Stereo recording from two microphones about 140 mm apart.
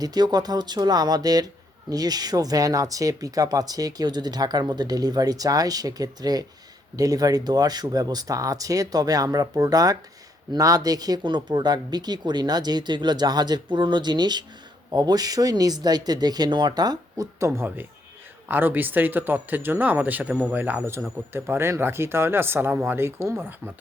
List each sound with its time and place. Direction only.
0.0 s speech: 30° right (ahead or behind)